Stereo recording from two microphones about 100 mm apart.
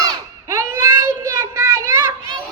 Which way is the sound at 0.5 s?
30° right (ahead or behind).